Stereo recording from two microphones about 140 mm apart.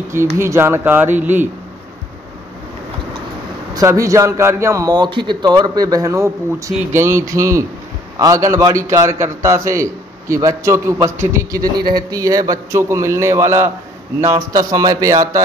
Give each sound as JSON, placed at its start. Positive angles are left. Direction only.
{"t": 0.4, "sound": "speech", "side_deg": -20}
{"t": 3.7, "sound": "a man's voice", "side_deg": -25}